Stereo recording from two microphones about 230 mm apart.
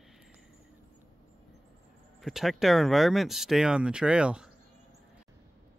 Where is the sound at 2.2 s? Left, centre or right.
Centre.